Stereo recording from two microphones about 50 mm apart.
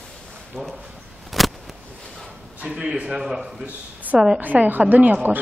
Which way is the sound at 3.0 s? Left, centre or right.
Centre.